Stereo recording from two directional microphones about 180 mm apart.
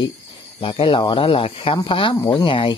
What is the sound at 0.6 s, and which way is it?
Speech, 30° left (ahead or behind).